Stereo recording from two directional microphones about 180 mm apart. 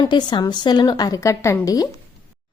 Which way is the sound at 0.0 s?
25° left (ahead or behind).